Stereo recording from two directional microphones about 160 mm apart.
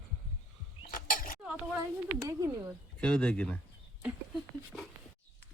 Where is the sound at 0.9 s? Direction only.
60° left (ahead or behind).